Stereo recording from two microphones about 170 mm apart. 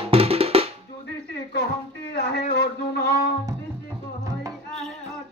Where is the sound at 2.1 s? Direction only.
80° left.